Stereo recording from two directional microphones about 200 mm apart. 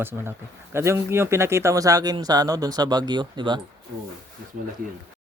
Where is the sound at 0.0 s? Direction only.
10° right (ahead or behind).